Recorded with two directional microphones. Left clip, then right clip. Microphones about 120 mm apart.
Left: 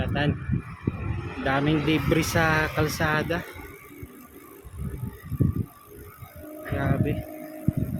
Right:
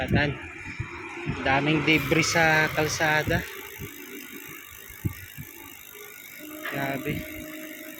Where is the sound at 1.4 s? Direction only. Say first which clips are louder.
Right 1 dB; 30° left (ahead or behind).